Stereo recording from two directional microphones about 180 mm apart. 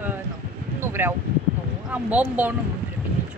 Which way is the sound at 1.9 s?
10° right (ahead or behind).